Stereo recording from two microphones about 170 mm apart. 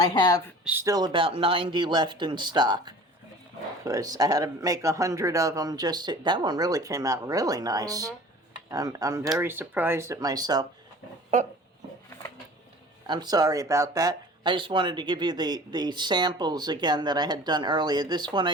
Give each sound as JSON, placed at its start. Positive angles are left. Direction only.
{"t": 0.1, "sound": "speech", "side_deg": 25}
{"t": 0.6, "sound": "speech", "side_deg": -10}
{"t": 13.1, "sound": "speech", "side_deg": -25}